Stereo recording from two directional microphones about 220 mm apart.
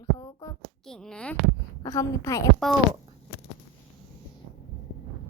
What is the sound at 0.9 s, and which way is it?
A child's voice, 5° left (ahead or behind).